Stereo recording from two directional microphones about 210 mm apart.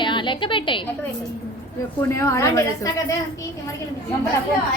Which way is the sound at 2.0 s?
15° left (ahead or behind).